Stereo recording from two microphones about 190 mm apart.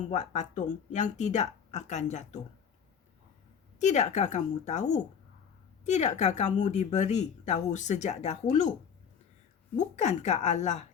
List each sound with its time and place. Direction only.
0.1 s speech: 40° left (ahead or behind)
3.8 s speech: 40° left (ahead or behind)
9.7 s speech: 40° left (ahead or behind)